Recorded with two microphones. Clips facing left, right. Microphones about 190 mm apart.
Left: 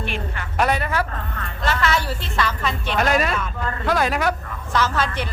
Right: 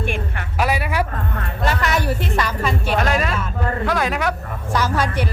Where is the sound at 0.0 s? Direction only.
50° right (ahead or behind).